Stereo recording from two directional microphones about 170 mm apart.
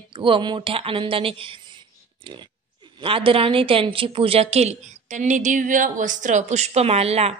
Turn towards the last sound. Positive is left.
turn(degrees=-35)  # may be behind; listen again after turning